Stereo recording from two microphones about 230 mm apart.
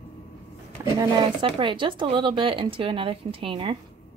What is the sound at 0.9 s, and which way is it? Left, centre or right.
Speech, right.